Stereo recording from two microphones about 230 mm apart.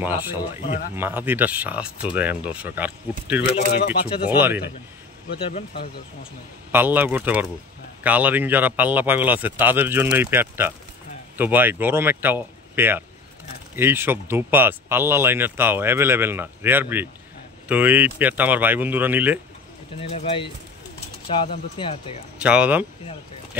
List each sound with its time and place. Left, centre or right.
0.0 s speech: centre
0.4 s speech: left
0.9 s speech: centre
6.7 s speech: centre
20.0 s speech: left
22.4 s speech: centre